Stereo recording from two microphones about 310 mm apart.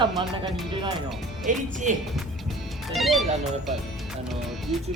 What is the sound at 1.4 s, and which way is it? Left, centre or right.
Speech, right.